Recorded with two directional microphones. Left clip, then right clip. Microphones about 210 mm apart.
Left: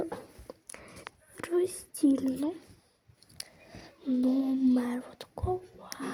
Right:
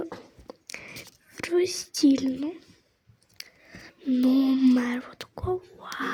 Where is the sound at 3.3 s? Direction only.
10° right (ahead or behind).